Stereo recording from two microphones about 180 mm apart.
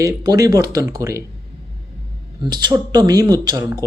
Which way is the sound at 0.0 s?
20° right (ahead or behind).